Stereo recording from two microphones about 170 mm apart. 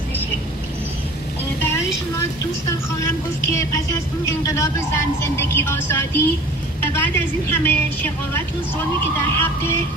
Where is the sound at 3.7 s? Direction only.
20° left (ahead or behind).